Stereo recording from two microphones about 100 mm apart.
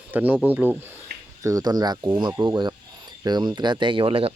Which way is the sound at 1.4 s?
35° right (ahead or behind).